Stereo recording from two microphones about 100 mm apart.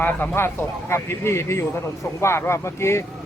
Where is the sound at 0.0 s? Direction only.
20° left (ahead or behind).